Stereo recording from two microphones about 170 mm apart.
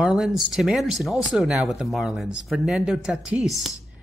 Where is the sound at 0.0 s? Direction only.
Centre (ahead or behind).